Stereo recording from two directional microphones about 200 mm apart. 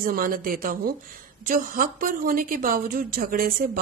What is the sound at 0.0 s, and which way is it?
Speech, 45° right (ahead or behind).